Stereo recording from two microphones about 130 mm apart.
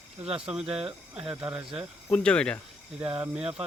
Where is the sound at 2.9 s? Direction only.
10° right (ahead or behind).